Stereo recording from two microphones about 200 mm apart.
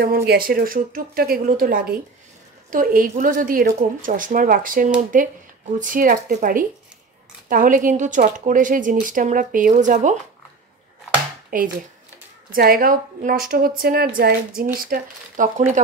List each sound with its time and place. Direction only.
0.0 s a woman's voice: 50° right (ahead or behind)
11.5 s a woman's voice: 40° right (ahead or behind)